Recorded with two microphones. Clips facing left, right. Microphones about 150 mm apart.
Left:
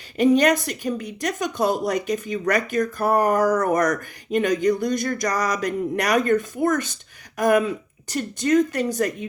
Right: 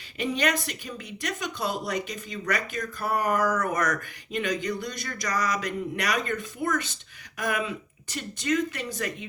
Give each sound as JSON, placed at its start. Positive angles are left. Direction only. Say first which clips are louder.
{"t": 0.2, "sound": "a woman's voice", "louder": "left 10 dB", "side_deg": 40}